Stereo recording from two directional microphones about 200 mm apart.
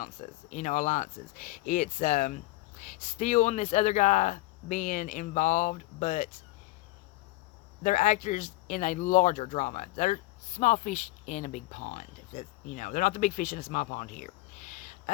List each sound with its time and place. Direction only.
0.0 s speech: 35° left (ahead or behind)
7.9 s speech: 40° left (ahead or behind)